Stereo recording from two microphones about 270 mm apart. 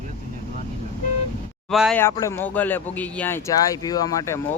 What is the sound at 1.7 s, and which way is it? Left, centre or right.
Speech, centre.